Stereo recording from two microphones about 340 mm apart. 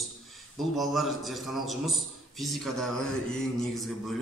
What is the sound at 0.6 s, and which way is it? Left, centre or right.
A man's voice, centre.